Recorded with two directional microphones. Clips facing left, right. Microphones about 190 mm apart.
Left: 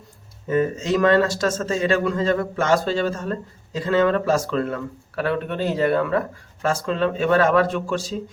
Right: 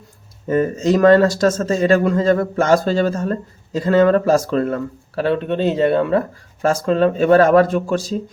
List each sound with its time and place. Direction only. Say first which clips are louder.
0.4 s a man's voice: right 4 dB; 40° right (ahead or behind)
5.2 s speech: right 5 dB; 25° right (ahead or behind)
6.6 s a man's voice: right 6 dB; 40° right (ahead or behind)